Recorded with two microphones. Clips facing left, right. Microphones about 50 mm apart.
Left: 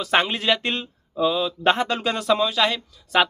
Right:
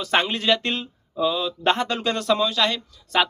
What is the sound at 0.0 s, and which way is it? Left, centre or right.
Speech, centre.